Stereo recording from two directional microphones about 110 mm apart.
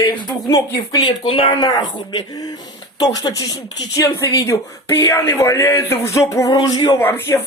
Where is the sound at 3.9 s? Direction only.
30° left (ahead or behind).